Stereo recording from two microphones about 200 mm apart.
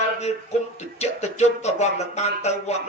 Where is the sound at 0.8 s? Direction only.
35° left (ahead or behind).